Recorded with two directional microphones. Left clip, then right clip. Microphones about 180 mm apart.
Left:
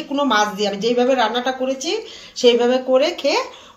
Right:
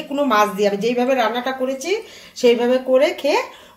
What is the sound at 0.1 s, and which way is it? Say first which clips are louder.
A woman's voice: right 1 dB; 40° right (ahead or behind).